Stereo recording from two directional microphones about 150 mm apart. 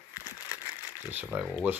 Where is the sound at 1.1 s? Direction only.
15° right (ahead or behind).